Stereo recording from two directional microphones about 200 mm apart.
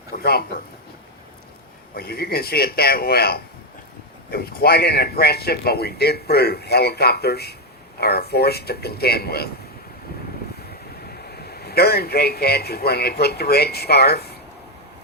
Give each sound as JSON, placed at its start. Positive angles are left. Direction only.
{"t": 0.2, "sound": "speech", "side_deg": 50}
{"t": 2.0, "sound": "speech", "side_deg": 50}
{"t": 11.1, "sound": "a man's voice", "side_deg": 50}